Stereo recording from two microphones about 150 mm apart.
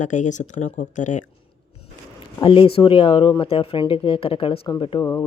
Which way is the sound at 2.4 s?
35° left (ahead or behind).